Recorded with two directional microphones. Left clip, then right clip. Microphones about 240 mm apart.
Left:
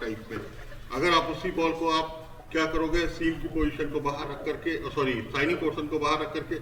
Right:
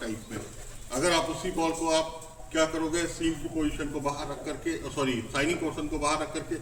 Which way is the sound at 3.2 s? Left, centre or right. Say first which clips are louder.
Left 2 dB; centre.